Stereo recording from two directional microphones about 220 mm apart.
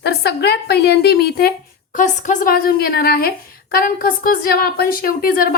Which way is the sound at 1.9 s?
35° left (ahead or behind).